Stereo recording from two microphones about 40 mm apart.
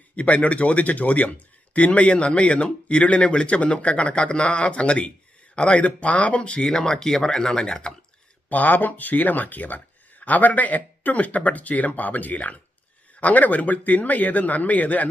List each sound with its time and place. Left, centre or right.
0.2 s speech: left
6.7 s speech: centre
8.4 s speech: left